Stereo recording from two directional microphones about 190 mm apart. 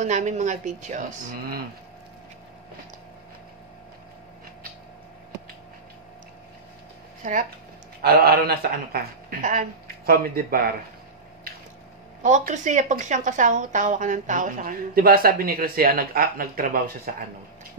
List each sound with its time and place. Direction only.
0.0 s speech: 40° right (ahead or behind)
7.2 s speech: 40° right (ahead or behind)
8.0 s a woman's voice: 55° right (ahead or behind)
12.2 s a woman's voice: 40° right (ahead or behind)